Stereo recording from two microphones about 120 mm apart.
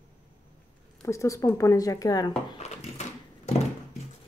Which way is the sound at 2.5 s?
65° left (ahead or behind).